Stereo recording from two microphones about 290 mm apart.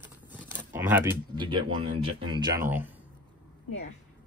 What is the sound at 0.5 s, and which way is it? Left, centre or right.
Speech, centre.